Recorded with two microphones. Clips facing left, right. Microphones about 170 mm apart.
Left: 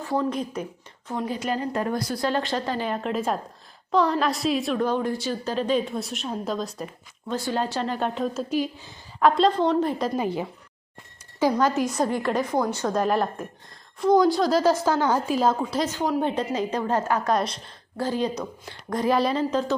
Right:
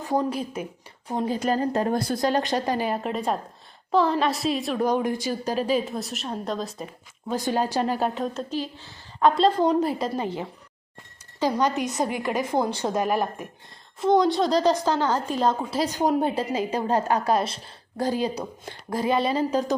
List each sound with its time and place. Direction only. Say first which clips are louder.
0.3 s a woman's voice: left 1 dB; 10° right (ahead or behind)
1.1 s a woman's voice: right 2 dB; 25° right (ahead or behind)
1.4 s a woman's voice: right 4 dB; 40° right (ahead or behind); by 4.8 s centre (ahead or behind)
4.8 s a woman's voice: right 1 dB; 15° right (ahead or behind)
7.3 s a woman's voice: right 2 dB; 15° right (ahead or behind); by 8.9 s 15° left (ahead or behind)
9.2 s a woman's voice: even; centre (ahead or behind)
10.2 s speech: left 2 dB; 10° left (ahead or behind)
11.6 s a woman's voice: left 2 dB; centre (ahead or behind)
12.4 s a woman's voice: even; 25° right (ahead or behind)
13.0 s a woman's voice: left 2 dB; 5° right (ahead or behind)
15.8 s a woman's voice: right 4 dB; 15° right (ahead or behind)
19.0 s a woman's voice: left 1 dB; centre (ahead or behind)